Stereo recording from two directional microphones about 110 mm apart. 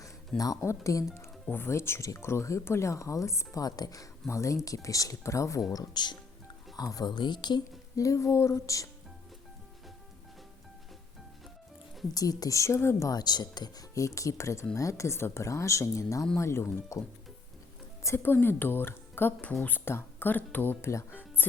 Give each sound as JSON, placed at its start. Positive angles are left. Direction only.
{"t": 0.3, "sound": "speech", "side_deg": 30}
{"t": 12.1, "sound": "speech", "side_deg": 35}
{"t": 18.0, "sound": "speech", "side_deg": 20}